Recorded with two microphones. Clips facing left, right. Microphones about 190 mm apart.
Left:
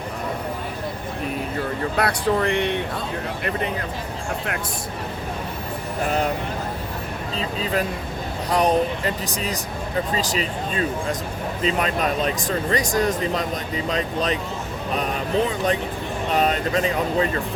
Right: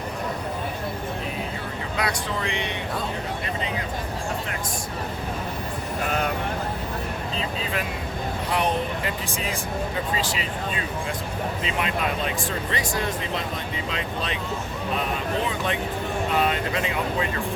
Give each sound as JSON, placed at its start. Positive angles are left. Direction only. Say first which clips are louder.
{"t": 2.0, "sound": "speech", "louder": "left 7 dB", "side_deg": 60}
{"t": 8.4, "sound": "speech", "louder": "left 6 dB", "side_deg": 40}
{"t": 15.4, "sound": "speech", "louder": "left 4 dB", "side_deg": 40}